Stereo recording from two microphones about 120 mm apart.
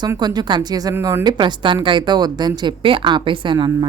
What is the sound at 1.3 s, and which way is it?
Speech, 40° right (ahead or behind).